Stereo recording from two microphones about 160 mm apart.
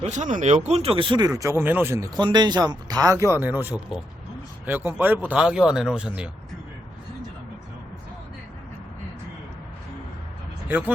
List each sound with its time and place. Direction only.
0.0 s speech: 50° right (ahead or behind); by 2.0 s 15° right (ahead or behind)
2.1 s speech: 25° right (ahead or behind); by 6.3 s 5° right (ahead or behind)
10.7 s speech: 10° right (ahead or behind)